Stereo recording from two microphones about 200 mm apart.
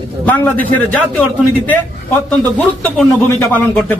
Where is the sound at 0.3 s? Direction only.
10° left (ahead or behind).